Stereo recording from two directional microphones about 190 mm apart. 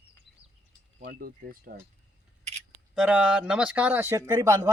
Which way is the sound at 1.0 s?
50° right (ahead or behind).